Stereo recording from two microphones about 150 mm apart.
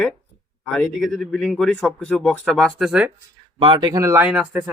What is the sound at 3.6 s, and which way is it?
Speech, 30° right (ahead or behind).